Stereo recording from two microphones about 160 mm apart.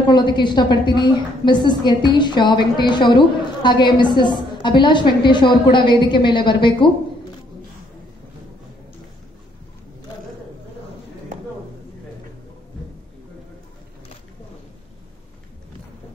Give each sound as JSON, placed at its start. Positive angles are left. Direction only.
{"t": 0.1, "sound": "a woman's voice", "side_deg": 30}